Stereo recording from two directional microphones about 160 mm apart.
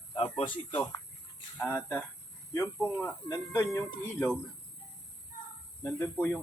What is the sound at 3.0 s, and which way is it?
Speech, 15° left (ahead or behind).